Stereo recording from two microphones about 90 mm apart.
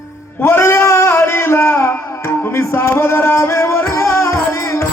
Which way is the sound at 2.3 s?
30° left (ahead or behind).